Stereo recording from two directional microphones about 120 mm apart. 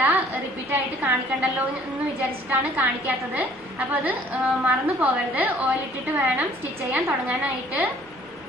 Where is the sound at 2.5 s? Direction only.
15° right (ahead or behind).